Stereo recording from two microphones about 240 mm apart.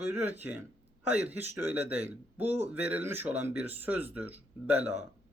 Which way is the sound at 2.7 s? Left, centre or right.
Centre.